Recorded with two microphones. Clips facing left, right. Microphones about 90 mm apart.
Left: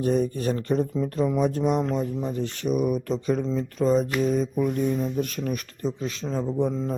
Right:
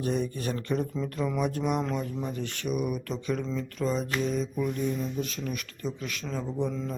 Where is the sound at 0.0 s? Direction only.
40° left (ahead or behind).